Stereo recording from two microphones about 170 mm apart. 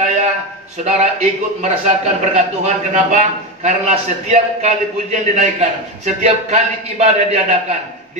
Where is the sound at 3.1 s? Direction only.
40° right (ahead or behind).